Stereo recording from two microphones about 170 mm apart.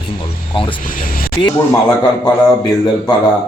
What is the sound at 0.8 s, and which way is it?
Speech, 55° left (ahead or behind).